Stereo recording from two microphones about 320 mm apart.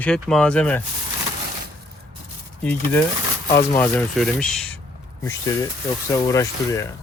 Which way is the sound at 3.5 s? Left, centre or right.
Left.